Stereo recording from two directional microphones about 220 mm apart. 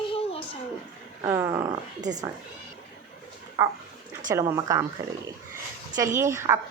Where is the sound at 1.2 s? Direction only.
10° right (ahead or behind).